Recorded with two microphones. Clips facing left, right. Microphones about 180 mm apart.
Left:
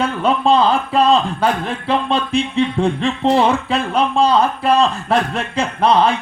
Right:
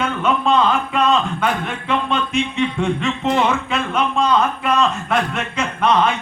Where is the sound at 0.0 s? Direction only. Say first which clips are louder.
Left 3 dB; 35° left (ahead or behind).